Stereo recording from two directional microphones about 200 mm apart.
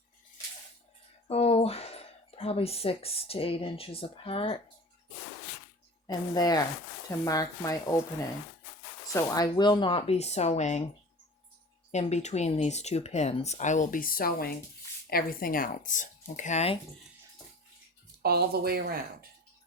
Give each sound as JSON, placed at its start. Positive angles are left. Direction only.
{"t": 1.3, "sound": "speech", "side_deg": 30}
{"t": 6.1, "sound": "speech", "side_deg": 20}
{"t": 9.1, "sound": "speech", "side_deg": 20}
{"t": 11.9, "sound": "speech", "side_deg": 35}
{"t": 18.2, "sound": "speech", "side_deg": -50}